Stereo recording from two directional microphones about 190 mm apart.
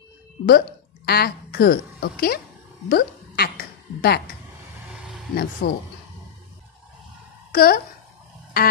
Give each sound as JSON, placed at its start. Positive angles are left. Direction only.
{"t": 0.5, "sound": "a woman's voice", "side_deg": 55}
{"t": 5.3, "sound": "speech", "side_deg": 55}
{"t": 7.5, "sound": "speech", "side_deg": 50}